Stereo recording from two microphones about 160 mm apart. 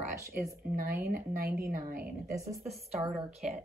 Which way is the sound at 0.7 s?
70° right (ahead or behind).